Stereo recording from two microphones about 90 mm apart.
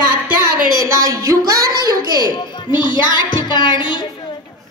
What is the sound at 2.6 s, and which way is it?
A woman's voice, 55° left (ahead or behind).